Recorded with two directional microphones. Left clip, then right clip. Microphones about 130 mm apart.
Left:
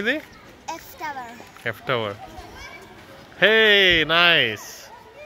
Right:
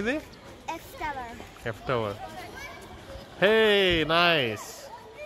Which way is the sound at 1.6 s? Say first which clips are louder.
Left 5 dB; 5° left (ahead or behind).